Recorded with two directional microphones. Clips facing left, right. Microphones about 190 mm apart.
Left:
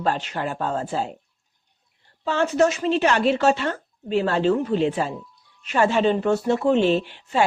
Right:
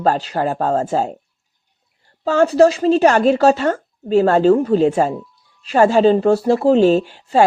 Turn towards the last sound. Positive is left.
turn(degrees=-40)  # may be behind; listen again after turning